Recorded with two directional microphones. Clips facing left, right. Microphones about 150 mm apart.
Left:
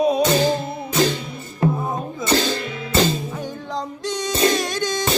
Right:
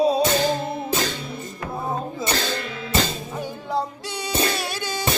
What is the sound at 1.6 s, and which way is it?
Music, 25° left (ahead or behind).